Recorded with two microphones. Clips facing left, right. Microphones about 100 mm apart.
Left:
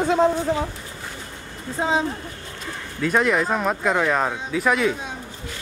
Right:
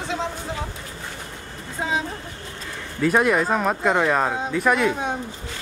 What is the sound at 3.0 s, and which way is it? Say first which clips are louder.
Speech: right 1 dB; 5° right (ahead or behind).